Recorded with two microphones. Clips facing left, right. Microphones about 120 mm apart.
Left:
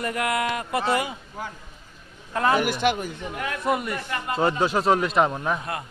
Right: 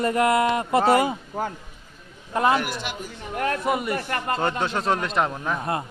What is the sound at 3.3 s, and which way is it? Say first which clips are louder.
Speech: right 8 dB; 45° right (ahead or behind).